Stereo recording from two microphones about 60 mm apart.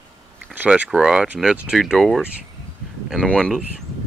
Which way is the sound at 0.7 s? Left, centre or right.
Centre.